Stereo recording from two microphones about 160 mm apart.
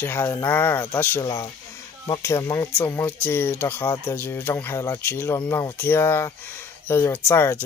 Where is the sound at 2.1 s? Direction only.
15° left (ahead or behind).